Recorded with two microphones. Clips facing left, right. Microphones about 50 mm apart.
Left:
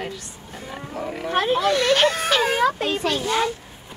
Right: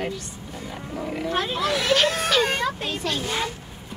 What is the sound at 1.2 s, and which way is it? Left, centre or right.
Speech, left.